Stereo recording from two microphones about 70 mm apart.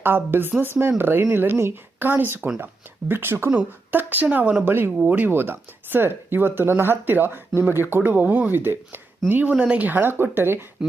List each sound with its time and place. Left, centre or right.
0.0 s speech: right
3.9 s speech: right